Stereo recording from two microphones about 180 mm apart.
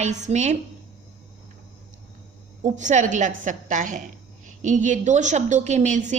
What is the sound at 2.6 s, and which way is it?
A woman's voice, 40° right (ahead or behind).